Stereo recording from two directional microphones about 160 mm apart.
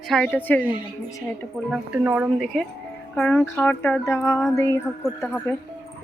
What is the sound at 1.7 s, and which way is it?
Speech, 10° right (ahead or behind).